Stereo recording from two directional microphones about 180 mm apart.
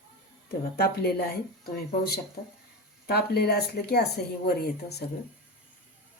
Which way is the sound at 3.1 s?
60° left (ahead or behind).